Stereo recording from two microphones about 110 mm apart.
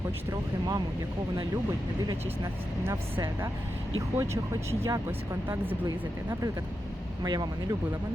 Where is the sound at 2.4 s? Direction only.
30° right (ahead or behind).